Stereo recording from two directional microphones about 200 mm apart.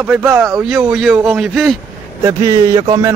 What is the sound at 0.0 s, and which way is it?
Speech, 10° right (ahead or behind).